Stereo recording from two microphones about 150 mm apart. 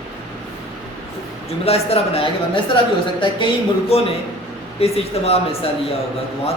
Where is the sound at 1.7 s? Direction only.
40° left (ahead or behind).